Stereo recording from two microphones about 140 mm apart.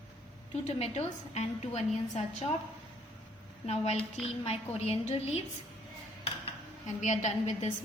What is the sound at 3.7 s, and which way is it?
A woman's voice, 50° left (ahead or behind).